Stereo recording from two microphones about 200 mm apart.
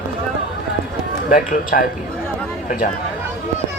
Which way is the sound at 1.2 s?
45° left (ahead or behind).